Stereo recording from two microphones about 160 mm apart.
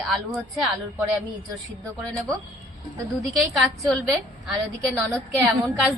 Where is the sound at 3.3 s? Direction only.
5° left (ahead or behind).